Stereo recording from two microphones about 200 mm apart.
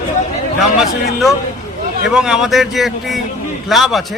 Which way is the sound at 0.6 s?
Centre (ahead or behind).